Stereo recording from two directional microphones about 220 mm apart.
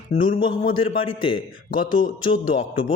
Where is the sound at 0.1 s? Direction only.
30° left (ahead or behind).